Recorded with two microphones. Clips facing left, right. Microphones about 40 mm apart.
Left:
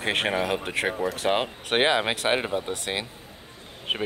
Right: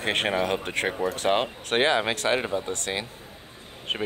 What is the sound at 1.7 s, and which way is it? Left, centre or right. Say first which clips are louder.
Speech: even; left.